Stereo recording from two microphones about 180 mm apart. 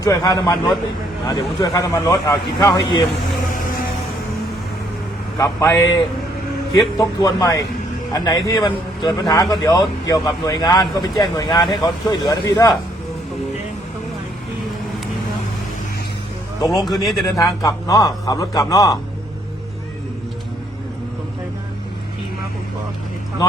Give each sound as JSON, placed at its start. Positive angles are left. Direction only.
{"t": 0.0, "sound": "a man's voice", "side_deg": 20}
{"t": 5.4, "sound": "a man's voice", "side_deg": 20}
{"t": 16.8, "sound": "speech", "side_deg": 0}
{"t": 17.2, "sound": "a man's voice", "side_deg": 20}